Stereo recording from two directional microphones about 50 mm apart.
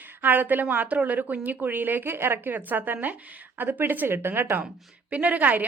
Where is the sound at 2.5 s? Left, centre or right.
Right.